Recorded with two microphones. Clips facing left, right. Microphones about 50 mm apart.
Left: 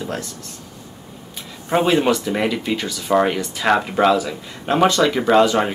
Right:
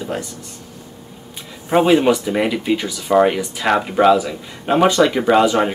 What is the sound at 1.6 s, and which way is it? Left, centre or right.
Speech, centre.